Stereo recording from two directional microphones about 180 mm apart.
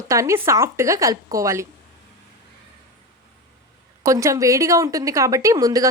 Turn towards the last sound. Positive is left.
turn(degrees=-20)  # may be behind; listen again after turning